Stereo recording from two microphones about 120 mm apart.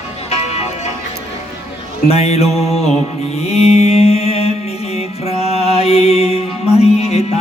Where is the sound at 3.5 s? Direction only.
60° left (ahead or behind).